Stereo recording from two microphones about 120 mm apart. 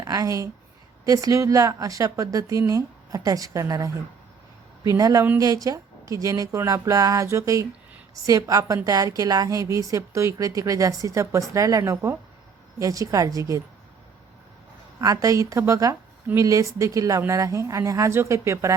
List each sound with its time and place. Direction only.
0.0 s a woman's voice: 30° right (ahead or behind)
15.0 s a woman's voice: 30° right (ahead or behind)